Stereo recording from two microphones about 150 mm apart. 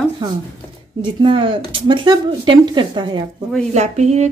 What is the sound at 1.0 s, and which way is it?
Speech, 35° right (ahead or behind).